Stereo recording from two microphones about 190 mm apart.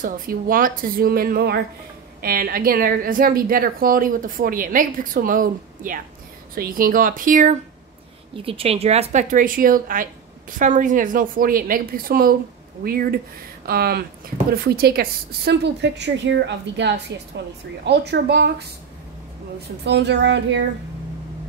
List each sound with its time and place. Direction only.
0.0 s a woman's voice: 45° right (ahead or behind)
8.4 s a woman's voice: 30° right (ahead or behind); by 18.7 s 65° right (ahead or behind)
19.8 s a woman's voice: 65° right (ahead or behind)